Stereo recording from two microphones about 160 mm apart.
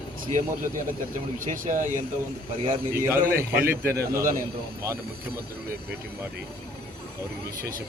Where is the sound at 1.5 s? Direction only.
55° right (ahead or behind).